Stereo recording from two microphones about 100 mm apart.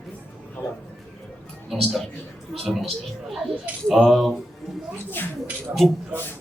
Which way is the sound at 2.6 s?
Centre (ahead or behind).